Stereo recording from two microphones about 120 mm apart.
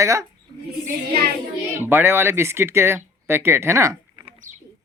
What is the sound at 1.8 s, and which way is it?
Speech, 20° right (ahead or behind).